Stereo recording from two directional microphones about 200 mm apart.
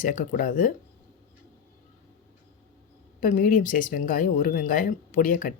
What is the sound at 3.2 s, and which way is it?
Speech, 40° left (ahead or behind).